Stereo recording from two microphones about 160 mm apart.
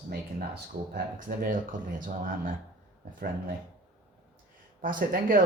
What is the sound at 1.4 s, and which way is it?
Speech, 60° right (ahead or behind).